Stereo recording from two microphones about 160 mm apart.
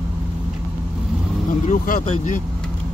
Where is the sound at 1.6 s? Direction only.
50° left (ahead or behind).